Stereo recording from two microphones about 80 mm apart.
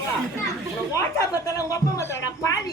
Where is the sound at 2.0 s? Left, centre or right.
Left.